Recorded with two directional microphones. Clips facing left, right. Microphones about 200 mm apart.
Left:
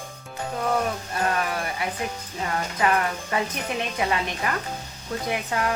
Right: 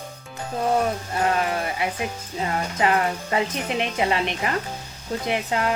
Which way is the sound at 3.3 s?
20° right (ahead or behind).